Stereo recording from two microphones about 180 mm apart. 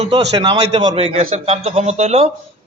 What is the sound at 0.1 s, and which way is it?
A man's voice, 25° right (ahead or behind).